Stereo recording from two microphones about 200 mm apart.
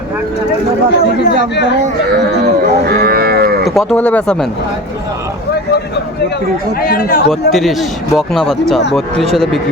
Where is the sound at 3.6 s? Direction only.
Centre (ahead or behind).